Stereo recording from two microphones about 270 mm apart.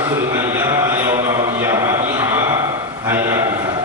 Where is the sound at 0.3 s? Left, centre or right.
Centre.